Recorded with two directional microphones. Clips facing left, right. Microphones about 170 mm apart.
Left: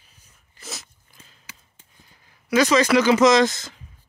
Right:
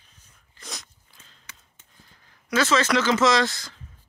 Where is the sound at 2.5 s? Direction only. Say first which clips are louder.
Left 5 dB; 15° left (ahead or behind).